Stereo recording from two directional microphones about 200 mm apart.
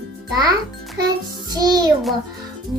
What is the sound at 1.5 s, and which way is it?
Child singing, 20° right (ahead or behind).